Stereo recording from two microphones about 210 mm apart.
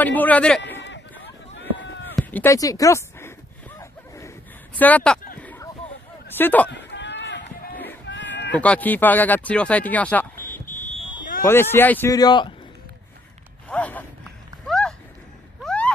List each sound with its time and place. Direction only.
0.0 s speech: 10° left (ahead or behind)
1.5 s run: 60° left (ahead or behind)
2.1 s a sound: 10° left (ahead or behind)
4.7 s speech: 5° left (ahead or behind)
5.4 s a sound: 10° left (ahead or behind)
6.3 s speech: 10° left (ahead or behind)
6.7 s run: 55° left (ahead or behind)
8.1 s a sound: 55° left (ahead or behind)
8.5 s speech: 5° left (ahead or behind)
10.7 s fire alarm: 40° left (ahead or behind)
11.4 s speech: 10° left (ahead or behind)
13.7 s a sound: 5° left (ahead or behind)